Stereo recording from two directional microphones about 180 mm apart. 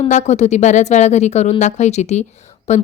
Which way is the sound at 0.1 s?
40° left (ahead or behind).